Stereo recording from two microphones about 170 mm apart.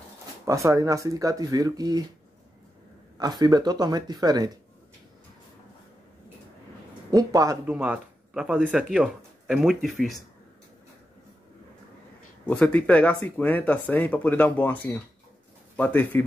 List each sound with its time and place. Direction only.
0.5 s speech: 20° right (ahead or behind)
3.2 s speech: 25° right (ahead or behind)
7.1 s speech: 20° right (ahead or behind)
7.6 s speech: 10° right (ahead or behind)
12.4 s speech: 10° left (ahead or behind)